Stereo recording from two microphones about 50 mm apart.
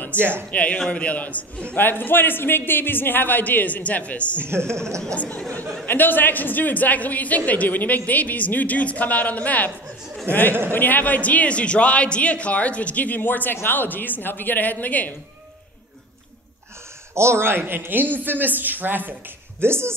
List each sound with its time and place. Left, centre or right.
0.3 s a man's voice: left
1.8 s a woman's voice: left
4.5 s a woman's voice: right
5.0 s a man's voice: left
5.9 s a woman's voice: left
10.3 s a man's voice: right
10.7 s a man's voice: left
17.1 s speech: right
19.6 s a woman's voice: right